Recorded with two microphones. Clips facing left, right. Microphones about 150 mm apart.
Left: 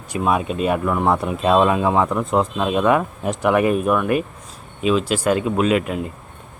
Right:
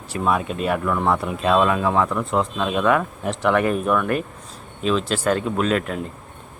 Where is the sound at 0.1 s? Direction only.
15° left (ahead or behind).